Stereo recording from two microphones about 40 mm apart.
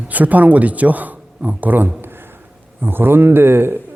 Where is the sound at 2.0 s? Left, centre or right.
Right.